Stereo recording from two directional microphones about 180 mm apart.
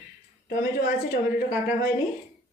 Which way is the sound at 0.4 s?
55° left (ahead or behind).